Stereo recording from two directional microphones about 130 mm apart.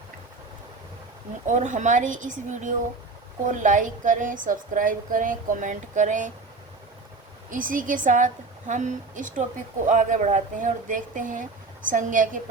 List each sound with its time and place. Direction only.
1.5 s a woman's voice: 70° right (ahead or behind)
7.5 s a woman's voice: 90° right